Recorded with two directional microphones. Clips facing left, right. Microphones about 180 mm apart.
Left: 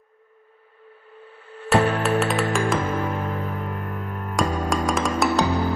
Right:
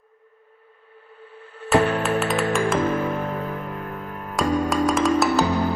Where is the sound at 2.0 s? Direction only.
Centre (ahead or behind).